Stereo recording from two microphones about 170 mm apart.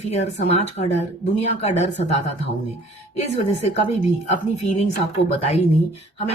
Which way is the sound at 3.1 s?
40° left (ahead or behind).